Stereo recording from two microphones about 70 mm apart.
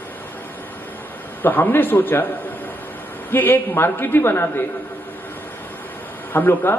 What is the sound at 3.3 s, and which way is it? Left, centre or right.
A man's voice, left.